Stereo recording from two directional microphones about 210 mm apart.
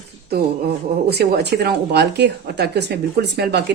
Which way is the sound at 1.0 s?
50° right (ahead or behind).